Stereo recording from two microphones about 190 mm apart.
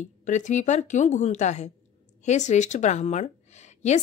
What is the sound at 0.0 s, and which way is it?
Speech, 40° left (ahead or behind).